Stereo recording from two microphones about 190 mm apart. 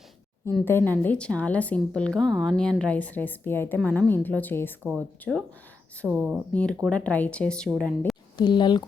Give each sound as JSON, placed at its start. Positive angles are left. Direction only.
{"t": 0.6, "sound": "a woman's voice", "side_deg": 10}
{"t": 4.8, "sound": "speech", "side_deg": -5}
{"t": 6.5, "sound": "a woman's voice", "side_deg": 5}
{"t": 8.4, "sound": "speech", "side_deg": 25}